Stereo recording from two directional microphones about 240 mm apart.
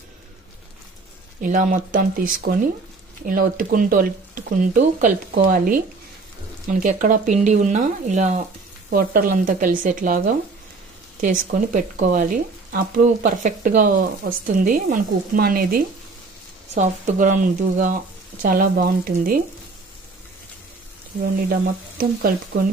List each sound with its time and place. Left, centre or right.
1.4 s speech: right
11.3 s speech: right
21.5 s speech: right